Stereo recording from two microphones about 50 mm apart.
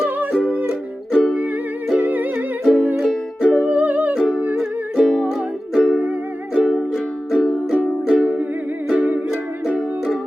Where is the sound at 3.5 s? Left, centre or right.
Right.